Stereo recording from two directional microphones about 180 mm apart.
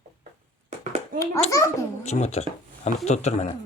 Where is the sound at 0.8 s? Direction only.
40° right (ahead or behind).